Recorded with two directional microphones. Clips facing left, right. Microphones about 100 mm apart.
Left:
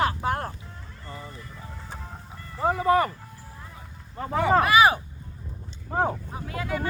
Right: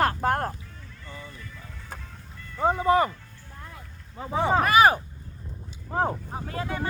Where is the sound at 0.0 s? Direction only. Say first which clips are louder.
Right 2 dB; 45° right (ahead or behind).